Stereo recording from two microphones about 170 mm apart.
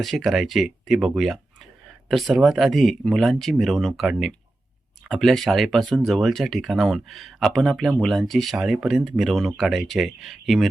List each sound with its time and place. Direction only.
0.0 s speech: centre (ahead or behind)